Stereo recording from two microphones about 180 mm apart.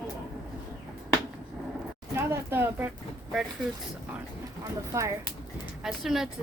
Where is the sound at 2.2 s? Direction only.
10° right (ahead or behind).